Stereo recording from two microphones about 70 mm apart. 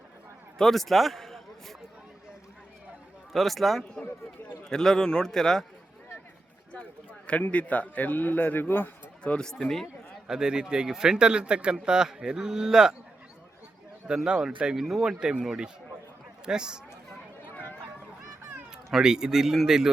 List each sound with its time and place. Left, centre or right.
0.6 s a man's voice: centre
3.3 s a man's voice: centre
6.7 s a man's voice: left
9.2 s a man's voice: centre
10.2 s speech: centre
14.1 s speech: centre
17.5 s a sound: left
18.9 s speech: centre